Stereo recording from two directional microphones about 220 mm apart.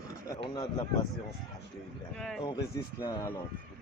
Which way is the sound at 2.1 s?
5° left (ahead or behind).